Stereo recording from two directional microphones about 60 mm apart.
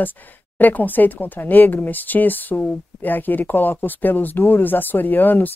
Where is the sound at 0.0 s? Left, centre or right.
Left.